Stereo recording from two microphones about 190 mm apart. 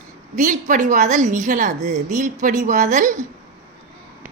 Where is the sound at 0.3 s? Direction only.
40° right (ahead or behind).